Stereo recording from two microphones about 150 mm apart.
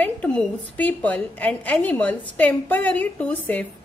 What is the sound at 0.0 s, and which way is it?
A woman's voice, 10° left (ahead or behind).